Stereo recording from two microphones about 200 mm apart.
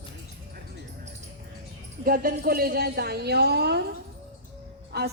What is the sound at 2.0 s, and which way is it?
A woman's voice, 45° right (ahead or behind).